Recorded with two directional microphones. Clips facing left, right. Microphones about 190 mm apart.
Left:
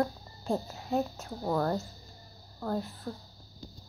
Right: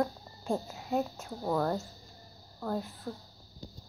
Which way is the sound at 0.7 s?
5° right (ahead or behind).